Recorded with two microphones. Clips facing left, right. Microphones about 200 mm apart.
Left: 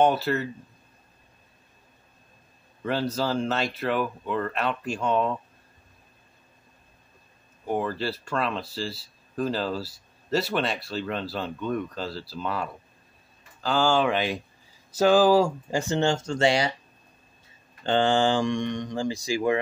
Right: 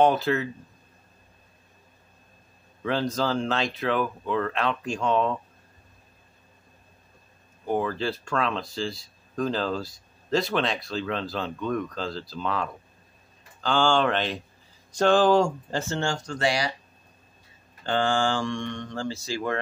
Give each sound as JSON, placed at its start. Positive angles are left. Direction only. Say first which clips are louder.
{"t": 0.0, "sound": "speech", "louder": "right 1 dB", "side_deg": 0}
{"t": 2.8, "sound": "speech", "louder": "right 1 dB", "side_deg": 5}
{"t": 7.6, "sound": "speech", "louder": "right 1 dB", "side_deg": 5}
{"t": 17.8, "sound": "speech", "louder": "left 3 dB", "side_deg": 20}